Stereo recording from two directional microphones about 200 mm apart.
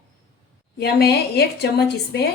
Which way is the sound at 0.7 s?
50° left (ahead or behind).